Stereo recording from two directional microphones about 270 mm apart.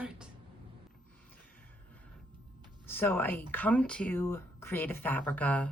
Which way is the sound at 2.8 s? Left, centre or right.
Centre.